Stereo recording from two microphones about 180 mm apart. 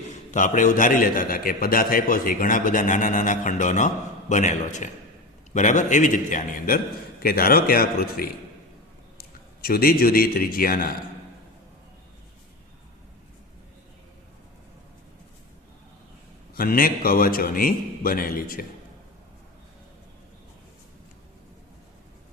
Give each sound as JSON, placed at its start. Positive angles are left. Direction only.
{"t": 0.1, "sound": "a man's voice", "side_deg": 45}
{"t": 16.6, "sound": "a man's voice", "side_deg": 55}